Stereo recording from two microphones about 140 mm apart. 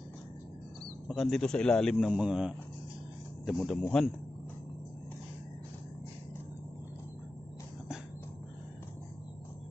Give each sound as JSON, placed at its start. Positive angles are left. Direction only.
{"t": 1.0, "sound": "speech", "side_deg": 0}